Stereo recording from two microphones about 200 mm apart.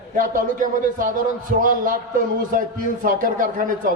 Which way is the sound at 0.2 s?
40° right (ahead or behind).